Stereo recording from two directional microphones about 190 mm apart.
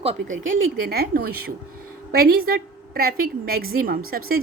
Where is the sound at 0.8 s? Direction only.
55° right (ahead or behind).